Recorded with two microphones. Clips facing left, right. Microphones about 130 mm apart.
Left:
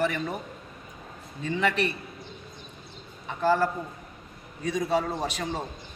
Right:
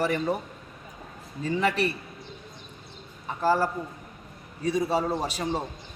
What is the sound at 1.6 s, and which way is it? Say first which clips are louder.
Speech: even; 35° right (ahead or behind).